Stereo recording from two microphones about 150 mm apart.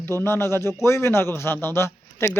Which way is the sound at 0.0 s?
15° left (ahead or behind).